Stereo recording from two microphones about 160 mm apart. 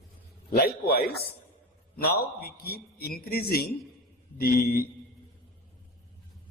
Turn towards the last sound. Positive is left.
turn(degrees=70)  # may be behind; listen again after turning